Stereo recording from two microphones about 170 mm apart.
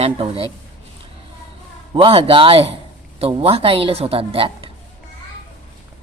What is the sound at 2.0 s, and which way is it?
Speech, 35° right (ahead or behind).